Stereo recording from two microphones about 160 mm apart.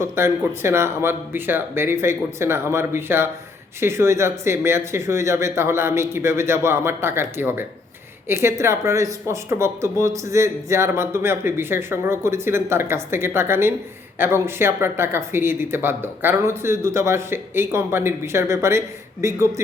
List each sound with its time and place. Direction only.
0.0 s speech: 15° right (ahead or behind)